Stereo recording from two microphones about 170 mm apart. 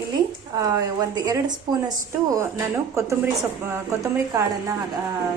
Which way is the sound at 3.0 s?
15° right (ahead or behind).